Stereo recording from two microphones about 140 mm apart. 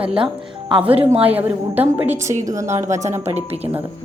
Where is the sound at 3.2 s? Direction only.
50° right (ahead or behind).